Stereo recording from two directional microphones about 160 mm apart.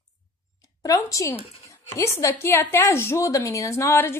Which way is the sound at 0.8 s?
20° left (ahead or behind).